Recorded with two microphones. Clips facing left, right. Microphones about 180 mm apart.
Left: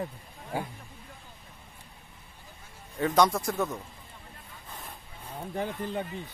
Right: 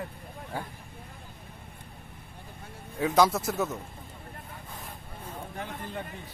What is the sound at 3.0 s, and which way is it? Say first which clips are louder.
Speech: right 1 dB; 5° right (ahead or behind).